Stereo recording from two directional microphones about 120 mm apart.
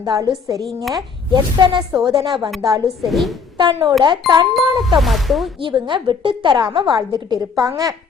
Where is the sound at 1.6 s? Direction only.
40° right (ahead or behind).